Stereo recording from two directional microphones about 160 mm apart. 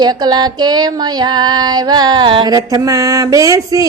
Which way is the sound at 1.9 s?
25° right (ahead or behind).